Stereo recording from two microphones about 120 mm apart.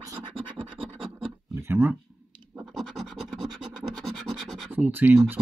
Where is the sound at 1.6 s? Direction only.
20° right (ahead or behind).